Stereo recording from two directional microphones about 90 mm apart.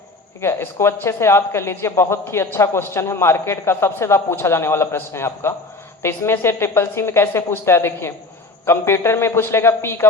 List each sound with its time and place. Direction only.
0.4 s speech: 30° left (ahead or behind)